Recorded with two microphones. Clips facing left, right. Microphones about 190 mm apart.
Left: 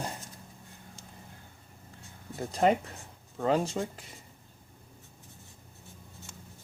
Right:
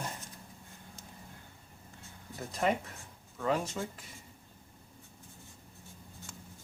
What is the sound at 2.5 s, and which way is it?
Speech, 35° left (ahead or behind).